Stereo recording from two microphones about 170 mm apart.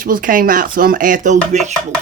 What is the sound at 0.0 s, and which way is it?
Speech, 55° right (ahead or behind).